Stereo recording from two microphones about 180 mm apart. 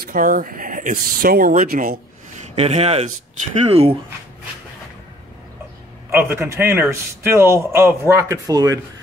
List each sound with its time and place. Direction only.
0.0 s speech: 50° right (ahead or behind)
2.5 s speech: 35° right (ahead or behind)
6.0 s a man's voice: 15° right (ahead or behind)